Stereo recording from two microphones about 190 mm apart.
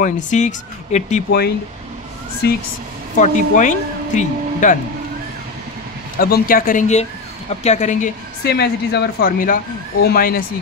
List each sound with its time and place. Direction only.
0.0 s speech: 40° left (ahead or behind)
2.4 s speech: 60° left (ahead or behind)
3.2 s speech: 40° left (ahead or behind)
6.1 s speech: 50° left (ahead or behind)
8.5 s speech: 60° left (ahead or behind)